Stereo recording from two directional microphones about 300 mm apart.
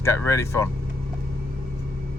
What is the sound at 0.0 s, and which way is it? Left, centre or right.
Speech, centre.